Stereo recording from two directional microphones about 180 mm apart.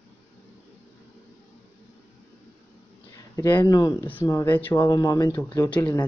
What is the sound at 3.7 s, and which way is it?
Speech, 20° left (ahead or behind).